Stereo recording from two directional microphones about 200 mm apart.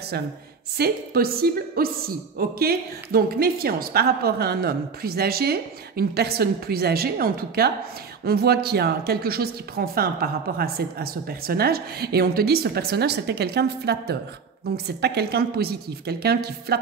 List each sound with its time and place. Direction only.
0.7 s a woman's voice: 50° right (ahead or behind)